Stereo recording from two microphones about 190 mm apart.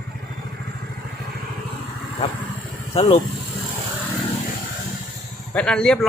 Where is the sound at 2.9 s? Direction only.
25° left (ahead or behind).